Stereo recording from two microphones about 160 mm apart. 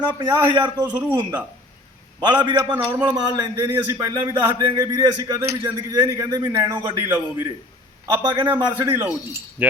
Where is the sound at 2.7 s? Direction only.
10° right (ahead or behind).